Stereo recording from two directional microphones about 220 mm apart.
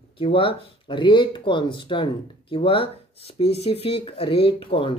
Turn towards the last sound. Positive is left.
turn(degrees=25)  # may be behind; listen again after turning